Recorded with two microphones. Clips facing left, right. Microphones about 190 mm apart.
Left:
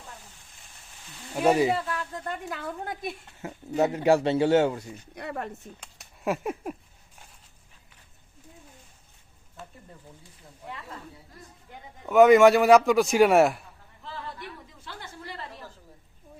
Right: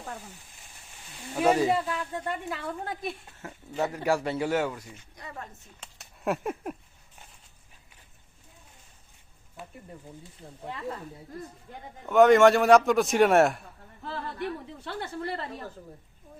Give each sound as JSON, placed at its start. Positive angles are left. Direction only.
{"t": 1.5, "sound": "speech", "side_deg": 10}
{"t": 1.7, "sound": "speech", "side_deg": -10}
{"t": 2.5, "sound": "a man's voice", "side_deg": 0}
{"t": 3.4, "sound": "a man's voice", "side_deg": 20}
{"t": 5.1, "sound": "speech", "side_deg": 70}
{"t": 5.8, "sound": "speech", "side_deg": 0}
{"t": 12.0, "sound": "a man's voice", "side_deg": 5}
{"t": 14.0, "sound": "a sound", "side_deg": -60}
{"t": 14.8, "sound": "a woman's voice", "side_deg": -65}